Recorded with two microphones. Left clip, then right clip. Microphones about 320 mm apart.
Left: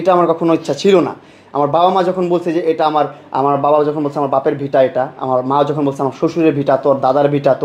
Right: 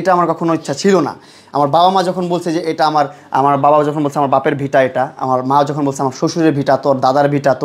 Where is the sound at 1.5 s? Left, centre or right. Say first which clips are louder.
Right 1 dB; right.